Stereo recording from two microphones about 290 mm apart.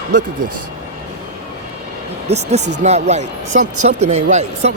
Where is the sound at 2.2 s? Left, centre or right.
Right.